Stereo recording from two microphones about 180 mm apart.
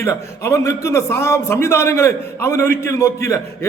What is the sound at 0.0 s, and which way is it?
A man's voice, 15° left (ahead or behind).